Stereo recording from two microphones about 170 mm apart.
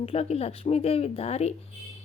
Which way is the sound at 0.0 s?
35° left (ahead or behind).